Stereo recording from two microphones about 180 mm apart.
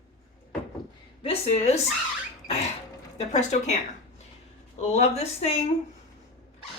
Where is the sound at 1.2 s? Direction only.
35° left (ahead or behind).